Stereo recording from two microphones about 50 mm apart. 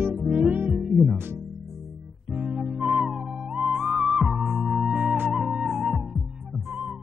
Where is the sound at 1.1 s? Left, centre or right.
Right.